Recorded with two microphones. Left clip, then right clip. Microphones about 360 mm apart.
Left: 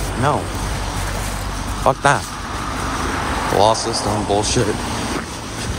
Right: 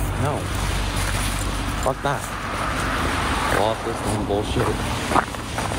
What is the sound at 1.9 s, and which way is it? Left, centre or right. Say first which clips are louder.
Speech: left 9 dB; left.